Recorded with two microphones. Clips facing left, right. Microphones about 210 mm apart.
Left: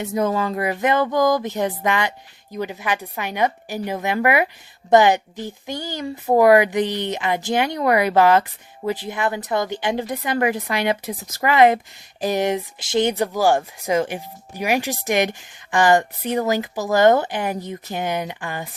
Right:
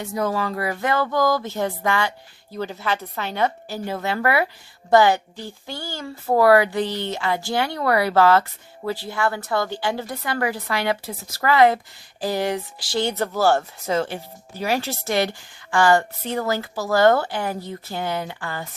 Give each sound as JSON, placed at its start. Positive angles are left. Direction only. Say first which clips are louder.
{"t": 0.0, "sound": "speech", "louder": "left 3 dB", "side_deg": 20}